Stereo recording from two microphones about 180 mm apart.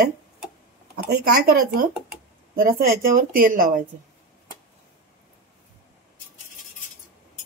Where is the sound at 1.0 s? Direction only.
60° right (ahead or behind).